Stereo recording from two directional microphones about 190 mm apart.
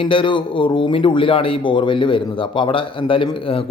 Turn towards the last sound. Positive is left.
turn(degrees=25)  # may be behind; listen again after turning